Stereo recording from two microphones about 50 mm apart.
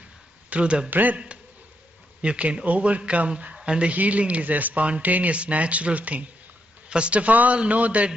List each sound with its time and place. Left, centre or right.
0.5 s speech: right
0.8 s a man's voice: right
2.2 s speech: right